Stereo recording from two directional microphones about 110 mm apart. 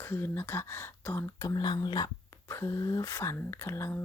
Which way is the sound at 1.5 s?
40° left (ahead or behind).